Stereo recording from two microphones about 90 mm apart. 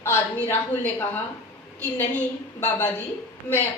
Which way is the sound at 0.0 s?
25° left (ahead or behind).